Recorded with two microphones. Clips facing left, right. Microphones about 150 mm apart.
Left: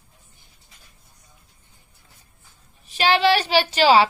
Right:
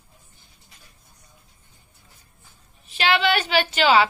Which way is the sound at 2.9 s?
35° left (ahead or behind).